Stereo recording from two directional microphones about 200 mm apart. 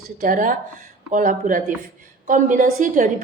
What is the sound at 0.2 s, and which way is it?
A woman's voice, 40° right (ahead or behind).